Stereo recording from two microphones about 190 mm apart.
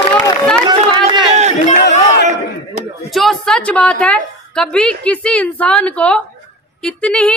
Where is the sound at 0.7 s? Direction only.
25° right (ahead or behind).